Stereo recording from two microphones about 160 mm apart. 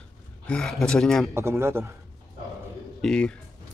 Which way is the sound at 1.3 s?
15° right (ahead or behind).